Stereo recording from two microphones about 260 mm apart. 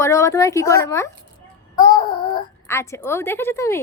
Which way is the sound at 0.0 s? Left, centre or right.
Centre.